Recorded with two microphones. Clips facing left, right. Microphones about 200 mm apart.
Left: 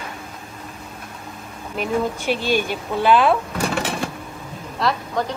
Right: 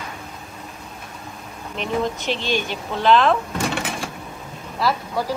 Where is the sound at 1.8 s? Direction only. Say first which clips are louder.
Left 1 dB; 10° left (ahead or behind).